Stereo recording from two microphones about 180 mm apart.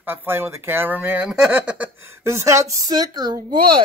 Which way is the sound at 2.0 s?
15° right (ahead or behind).